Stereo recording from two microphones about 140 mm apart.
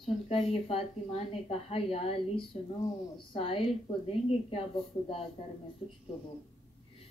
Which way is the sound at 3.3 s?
40° left (ahead or behind).